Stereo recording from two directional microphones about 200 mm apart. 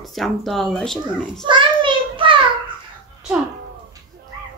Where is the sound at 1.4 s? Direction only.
25° right (ahead or behind).